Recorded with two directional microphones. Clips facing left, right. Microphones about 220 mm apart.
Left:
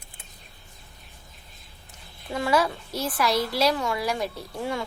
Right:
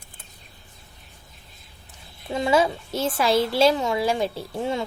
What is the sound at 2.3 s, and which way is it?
A woman's voice, 25° right (ahead or behind).